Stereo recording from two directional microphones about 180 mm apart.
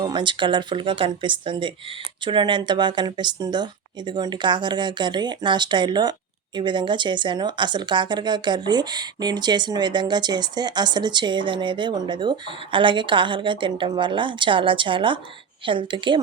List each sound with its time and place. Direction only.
0.0 s speech: 25° right (ahead or behind)